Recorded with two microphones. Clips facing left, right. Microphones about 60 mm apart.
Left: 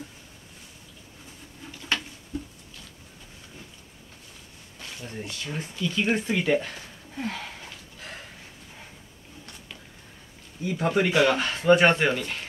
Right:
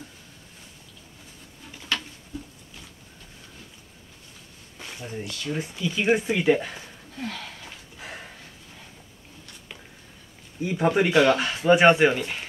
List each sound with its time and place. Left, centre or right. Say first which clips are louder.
4.7 s a sound: right 2 dB; centre
5.2 s speech: right 2 dB; left
5.5 s speech: right 3 dB; centre
7.2 s speech: left 2 dB; centre
10.6 s speech: right 2 dB; centre